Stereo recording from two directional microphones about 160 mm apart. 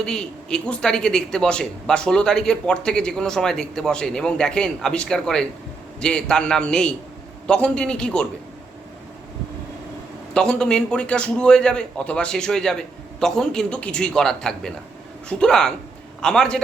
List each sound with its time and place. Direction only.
0.0 s speech: 5° left (ahead or behind)
10.3 s speech: 5° left (ahead or behind)